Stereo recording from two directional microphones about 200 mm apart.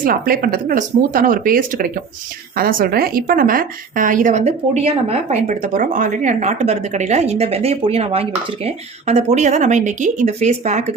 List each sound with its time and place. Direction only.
0.0 s a woman's voice: 45° right (ahead or behind)